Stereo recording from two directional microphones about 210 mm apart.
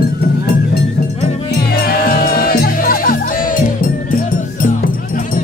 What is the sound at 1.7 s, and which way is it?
Music, 45° left (ahead or behind).